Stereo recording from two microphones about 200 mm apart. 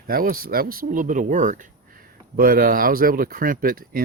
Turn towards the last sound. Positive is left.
turn(degrees=-45)  # may be behind; listen again after turning